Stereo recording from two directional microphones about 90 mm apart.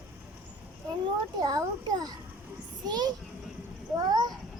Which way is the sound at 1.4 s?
45° right (ahead or behind).